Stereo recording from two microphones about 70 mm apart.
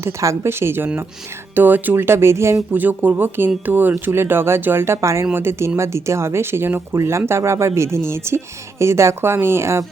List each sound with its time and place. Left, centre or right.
0.0 s speech: right
2.7 s speech: right